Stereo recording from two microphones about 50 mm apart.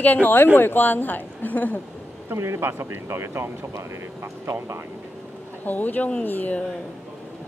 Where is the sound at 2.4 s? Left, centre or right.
Right.